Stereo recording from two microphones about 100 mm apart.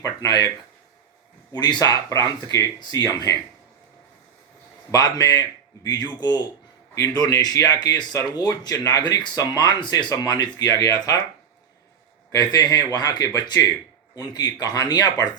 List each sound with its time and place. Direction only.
0.0 s speech: 35° left (ahead or behind)
1.6 s speech: 45° left (ahead or behind)
2.0 s speech: 30° left (ahead or behind)
4.9 s speech: 35° left (ahead or behind)
12.3 s speech: 40° left (ahead or behind)